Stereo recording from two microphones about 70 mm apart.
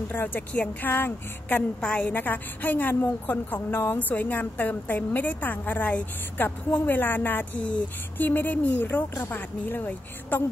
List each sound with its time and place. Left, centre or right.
0.1 s a woman's voice: left
1.8 s a woman's voice: centre
2.1 s a woman's voice: left